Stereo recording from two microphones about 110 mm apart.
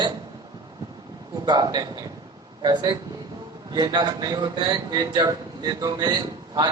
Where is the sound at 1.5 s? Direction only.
40° right (ahead or behind).